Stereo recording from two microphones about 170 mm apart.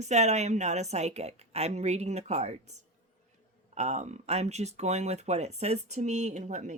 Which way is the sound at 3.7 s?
45° right (ahead or behind).